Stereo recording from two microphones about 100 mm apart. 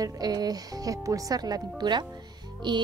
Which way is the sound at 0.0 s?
40° right (ahead or behind).